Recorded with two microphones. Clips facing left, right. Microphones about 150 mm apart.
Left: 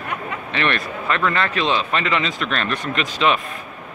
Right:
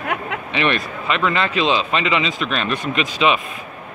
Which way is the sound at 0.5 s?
15° right (ahead or behind).